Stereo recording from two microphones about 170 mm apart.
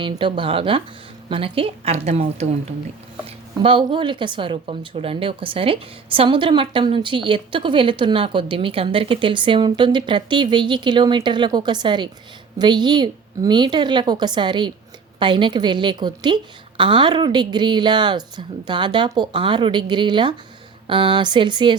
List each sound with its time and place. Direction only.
0.0 s a woman's voice: 30° right (ahead or behind)